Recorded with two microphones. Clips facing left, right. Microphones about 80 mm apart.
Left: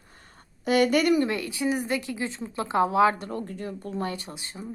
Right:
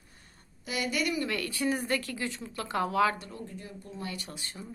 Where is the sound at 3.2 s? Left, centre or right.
Left.